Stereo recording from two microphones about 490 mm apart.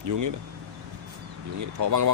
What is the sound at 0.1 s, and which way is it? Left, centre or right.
Speech, right.